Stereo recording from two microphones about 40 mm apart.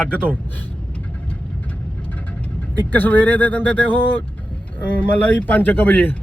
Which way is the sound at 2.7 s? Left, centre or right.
Left.